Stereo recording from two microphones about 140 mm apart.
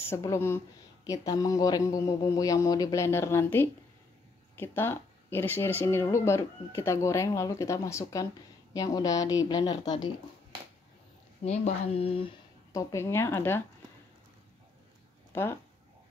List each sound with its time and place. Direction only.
0.1 s speech: 20° left (ahead or behind)
11.4 s speech: 55° left (ahead or behind)
12.7 s speech: 20° left (ahead or behind)